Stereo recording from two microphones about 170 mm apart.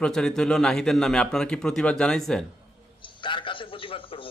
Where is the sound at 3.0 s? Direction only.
30° left (ahead or behind).